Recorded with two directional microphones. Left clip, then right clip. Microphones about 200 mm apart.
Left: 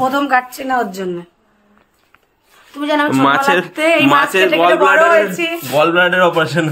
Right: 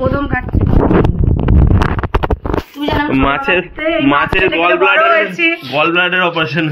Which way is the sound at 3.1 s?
5° left (ahead or behind).